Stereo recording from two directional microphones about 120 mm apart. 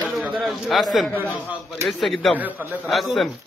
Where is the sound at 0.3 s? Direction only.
Centre (ahead or behind).